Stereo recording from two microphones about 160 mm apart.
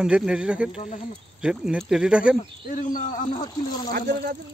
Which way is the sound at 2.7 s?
55° left (ahead or behind).